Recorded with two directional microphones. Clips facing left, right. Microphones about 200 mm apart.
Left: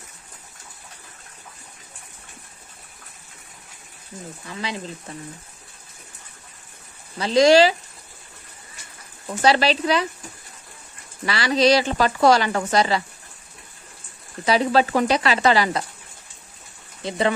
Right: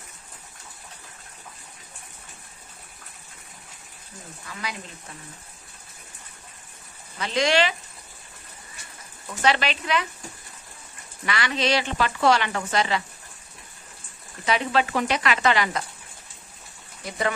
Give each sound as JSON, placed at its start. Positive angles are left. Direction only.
{"t": 4.6, "sound": "speech", "side_deg": 25}
{"t": 7.2, "sound": "speech", "side_deg": 35}
{"t": 9.4, "sound": "speech", "side_deg": 35}
{"t": 11.2, "sound": "speech", "side_deg": 35}
{"t": 14.4, "sound": "speech", "side_deg": 35}